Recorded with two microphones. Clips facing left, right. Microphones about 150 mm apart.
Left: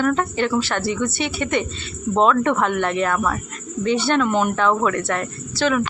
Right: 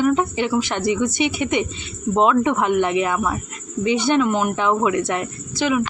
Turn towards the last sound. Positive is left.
turn(degrees=-10)  # may be behind; listen again after turning